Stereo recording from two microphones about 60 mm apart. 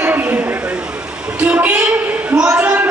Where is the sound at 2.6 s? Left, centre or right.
Right.